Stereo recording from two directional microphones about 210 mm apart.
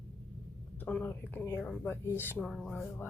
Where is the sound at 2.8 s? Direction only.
10° left (ahead or behind).